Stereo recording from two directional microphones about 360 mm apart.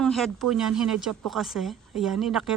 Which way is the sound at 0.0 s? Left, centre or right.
Centre.